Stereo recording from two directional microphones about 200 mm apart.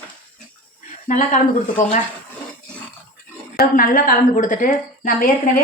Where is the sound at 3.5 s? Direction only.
45° left (ahead or behind).